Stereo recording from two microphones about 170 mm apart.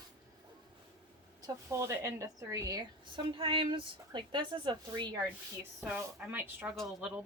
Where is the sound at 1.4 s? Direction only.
15° right (ahead or behind).